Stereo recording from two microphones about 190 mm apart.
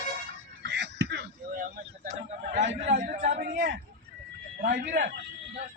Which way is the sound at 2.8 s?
45° right (ahead or behind).